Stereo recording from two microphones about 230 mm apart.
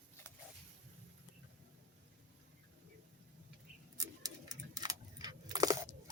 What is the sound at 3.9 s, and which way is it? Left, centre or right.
Keys jangling, centre.